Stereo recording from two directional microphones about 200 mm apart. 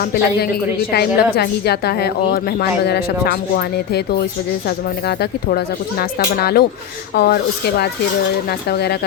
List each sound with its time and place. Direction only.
0.0 s a woman's voice: 55° left (ahead or behind)